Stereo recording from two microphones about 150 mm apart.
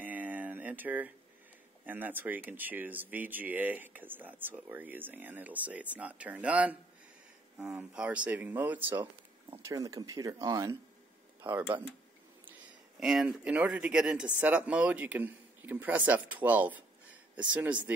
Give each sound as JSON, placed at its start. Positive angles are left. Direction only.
{"t": 0.0, "sound": "a sound", "side_deg": -10}
{"t": 1.9, "sound": "speech", "side_deg": -10}
{"t": 13.0, "sound": "speech", "side_deg": -5}